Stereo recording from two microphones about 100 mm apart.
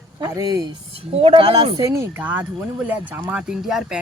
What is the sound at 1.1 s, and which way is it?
Speech, 80° right.